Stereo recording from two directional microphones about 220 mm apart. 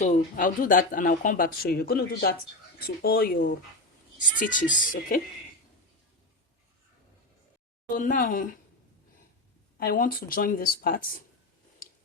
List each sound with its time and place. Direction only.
0.0 s speech: 35° left (ahead or behind)
7.9 s speech: 35° left (ahead or behind)
9.7 s speech: 40° left (ahead or behind)